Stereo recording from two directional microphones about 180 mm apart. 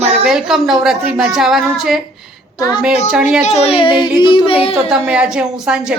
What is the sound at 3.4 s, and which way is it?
Speech, 35° left (ahead or behind).